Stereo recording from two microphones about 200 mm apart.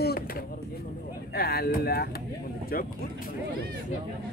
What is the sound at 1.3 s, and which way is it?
Speech, 50° left (ahead or behind).